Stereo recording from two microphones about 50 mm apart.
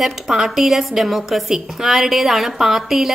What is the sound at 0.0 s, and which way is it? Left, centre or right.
A woman's voice, centre.